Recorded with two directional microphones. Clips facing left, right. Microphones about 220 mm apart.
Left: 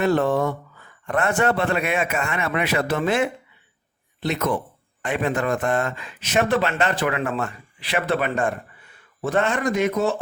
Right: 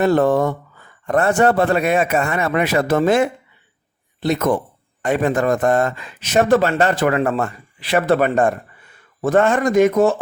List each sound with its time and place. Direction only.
0.0 s speech: 40° right (ahead or behind)